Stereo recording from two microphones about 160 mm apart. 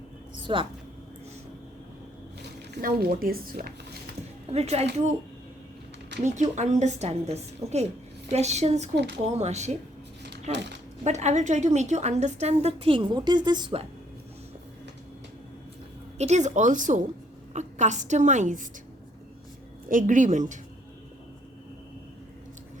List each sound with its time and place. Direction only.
0.3 s a sound: 30° right (ahead or behind)
2.8 s speech: 65° right (ahead or behind)
4.5 s speech: 40° right (ahead or behind)
6.2 s a woman's voice: 50° right (ahead or behind); by 13.8 s 30° right (ahead or behind)
16.1 s a woman's voice: 45° right (ahead or behind)
19.9 s a woman's voice: 55° right (ahead or behind)